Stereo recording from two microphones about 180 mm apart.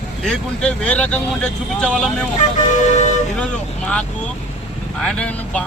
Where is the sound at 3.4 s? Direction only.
5° left (ahead or behind).